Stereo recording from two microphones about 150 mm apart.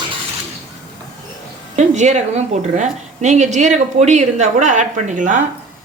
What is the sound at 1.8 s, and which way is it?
A woman's voice, 50° right (ahead or behind).